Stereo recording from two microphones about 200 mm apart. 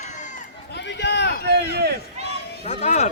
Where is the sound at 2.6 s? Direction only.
35° left (ahead or behind).